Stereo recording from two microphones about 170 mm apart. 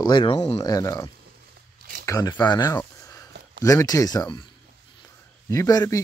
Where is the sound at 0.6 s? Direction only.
20° left (ahead or behind).